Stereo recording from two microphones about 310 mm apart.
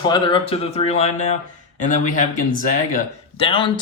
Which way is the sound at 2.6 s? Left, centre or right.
Left.